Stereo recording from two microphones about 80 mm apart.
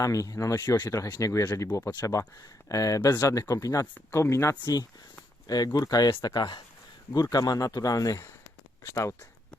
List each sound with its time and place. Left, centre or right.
0.0 s speech: left